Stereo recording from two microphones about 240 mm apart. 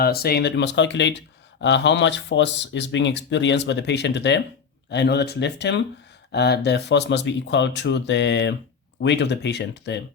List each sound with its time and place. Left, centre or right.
0.0 s speech: left